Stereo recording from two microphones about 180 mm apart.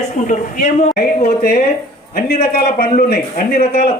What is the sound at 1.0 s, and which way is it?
A man's voice, 60° left (ahead or behind).